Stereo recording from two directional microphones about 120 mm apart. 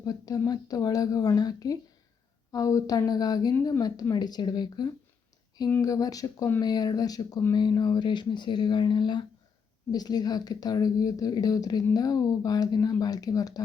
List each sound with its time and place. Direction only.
0.0 s a woman's voice: 30° left (ahead or behind)